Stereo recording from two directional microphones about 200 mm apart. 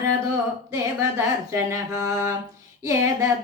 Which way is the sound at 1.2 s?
15° right (ahead or behind).